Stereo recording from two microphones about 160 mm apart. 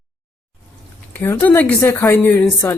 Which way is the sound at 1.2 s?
10° left (ahead or behind).